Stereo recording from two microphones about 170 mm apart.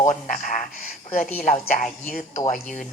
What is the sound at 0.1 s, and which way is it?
A woman's voice, 50° left (ahead or behind).